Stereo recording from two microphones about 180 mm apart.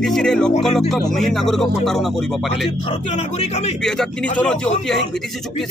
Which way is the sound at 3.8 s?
5° left (ahead or behind).